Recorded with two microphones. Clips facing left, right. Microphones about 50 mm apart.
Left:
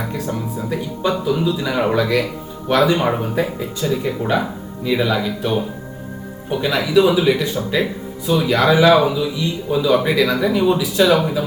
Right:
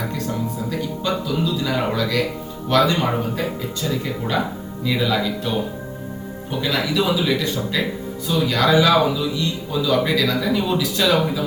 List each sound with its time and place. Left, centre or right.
0.3 s speech: left